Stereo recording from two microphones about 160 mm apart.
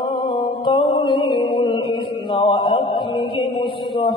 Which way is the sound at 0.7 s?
30° left (ahead or behind).